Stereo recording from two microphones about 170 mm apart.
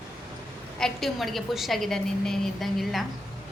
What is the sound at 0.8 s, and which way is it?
A woman's voice, centre (ahead or behind).